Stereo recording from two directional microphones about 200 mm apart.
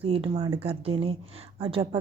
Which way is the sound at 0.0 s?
30° right (ahead or behind).